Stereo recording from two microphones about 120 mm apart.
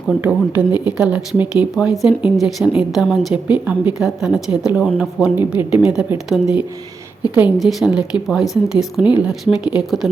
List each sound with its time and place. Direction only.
0.1 s speech: 10° right (ahead or behind)
7.6 s speech: 5° right (ahead or behind)